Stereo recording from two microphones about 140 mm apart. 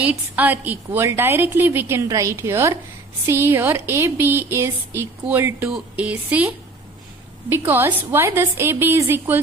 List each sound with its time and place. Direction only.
0.4 s a woman's voice: 10° right (ahead or behind)